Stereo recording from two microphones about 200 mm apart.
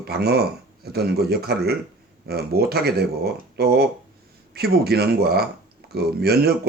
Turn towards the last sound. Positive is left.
turn(degrees=-50)  # may be behind; listen again after turning